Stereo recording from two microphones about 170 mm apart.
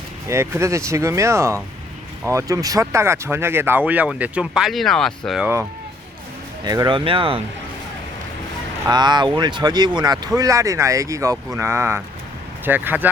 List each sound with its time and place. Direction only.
0.3 s speech: 15° right (ahead or behind); by 5.5 s centre (ahead or behind)
6.7 s speech: 25° right (ahead or behind)
8.9 s speech: 25° right (ahead or behind)